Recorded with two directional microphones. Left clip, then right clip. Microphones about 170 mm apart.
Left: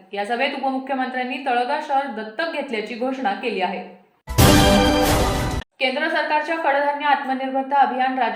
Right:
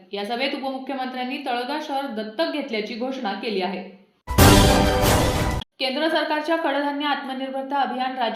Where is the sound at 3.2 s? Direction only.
50° right (ahead or behind).